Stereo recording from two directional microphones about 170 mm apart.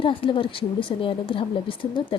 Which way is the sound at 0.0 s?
30° left (ahead or behind).